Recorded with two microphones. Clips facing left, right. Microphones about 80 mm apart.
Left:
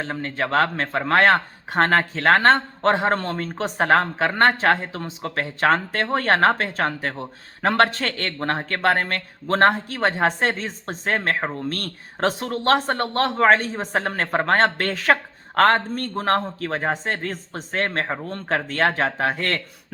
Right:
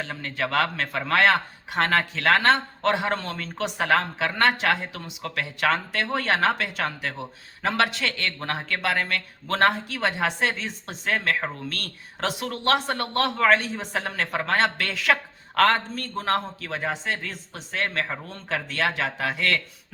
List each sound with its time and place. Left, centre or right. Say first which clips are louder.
0.0 s speech: left 3 dB; left